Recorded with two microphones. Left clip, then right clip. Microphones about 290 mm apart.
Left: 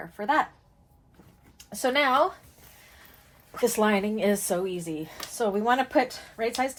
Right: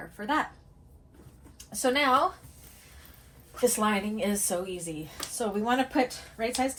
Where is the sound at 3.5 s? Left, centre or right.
Left.